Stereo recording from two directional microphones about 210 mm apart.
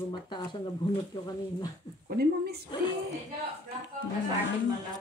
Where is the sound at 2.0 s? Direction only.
50° right (ahead or behind).